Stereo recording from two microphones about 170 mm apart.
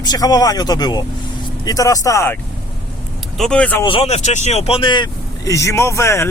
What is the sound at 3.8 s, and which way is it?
Speech, 35° left (ahead or behind).